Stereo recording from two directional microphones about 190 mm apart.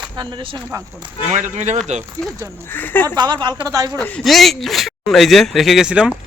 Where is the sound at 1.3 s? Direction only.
40° right (ahead or behind).